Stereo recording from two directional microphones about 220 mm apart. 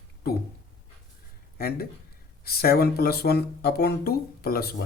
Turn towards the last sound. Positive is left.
turn(degrees=45)  # may be behind; listen again after turning